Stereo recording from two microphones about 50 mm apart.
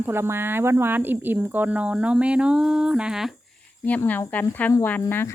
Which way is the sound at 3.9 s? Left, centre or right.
Left.